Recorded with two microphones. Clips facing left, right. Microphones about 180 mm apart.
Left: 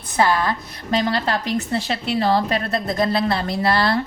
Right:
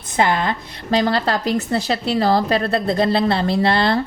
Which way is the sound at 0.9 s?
35° right (ahead or behind).